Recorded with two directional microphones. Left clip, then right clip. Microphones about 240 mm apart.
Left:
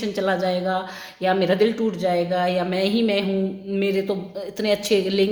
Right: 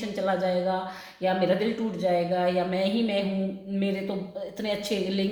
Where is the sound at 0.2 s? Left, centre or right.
Left.